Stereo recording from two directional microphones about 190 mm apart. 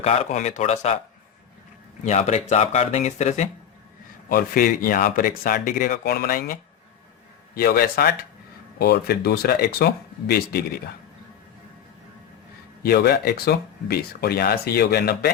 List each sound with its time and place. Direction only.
0.0 s speech: 35° left (ahead or behind)
2.0 s speech: 35° left (ahead or behind)
4.3 s speech: 50° left (ahead or behind)
12.8 s speech: 55° left (ahead or behind)